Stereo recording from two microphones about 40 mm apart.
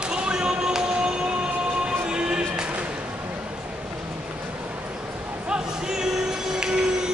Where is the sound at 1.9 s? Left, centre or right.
Centre.